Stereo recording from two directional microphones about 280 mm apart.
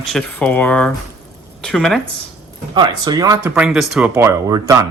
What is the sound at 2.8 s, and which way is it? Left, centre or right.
Speech, centre.